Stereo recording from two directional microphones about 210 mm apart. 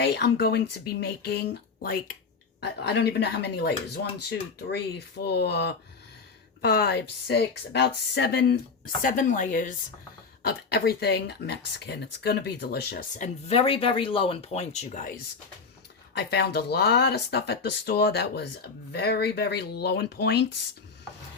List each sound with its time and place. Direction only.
0.0 s speech: 50° left (ahead or behind)
2.6 s speech: 50° left (ahead or behind)
10.7 s speech: 50° left (ahead or behind)
16.1 s speech: 55° left (ahead or behind)